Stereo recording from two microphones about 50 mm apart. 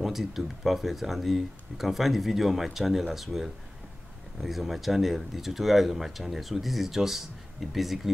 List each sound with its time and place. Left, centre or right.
0.0 s speech: centre